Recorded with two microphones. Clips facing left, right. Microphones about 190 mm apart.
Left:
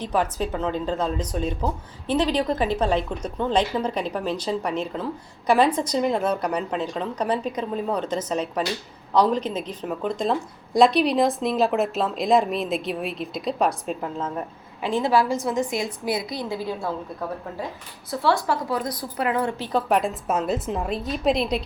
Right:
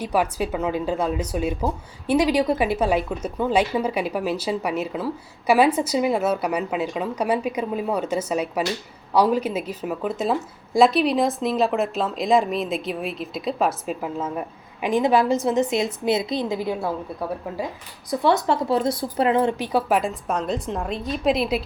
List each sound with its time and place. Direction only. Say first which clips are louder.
0.0 s a woman's voice: right 1 dB; 10° right (ahead or behind)
19.9 s speech: even; centre (ahead or behind)